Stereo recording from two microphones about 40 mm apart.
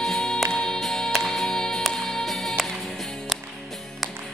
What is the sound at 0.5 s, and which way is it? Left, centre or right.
Music, centre.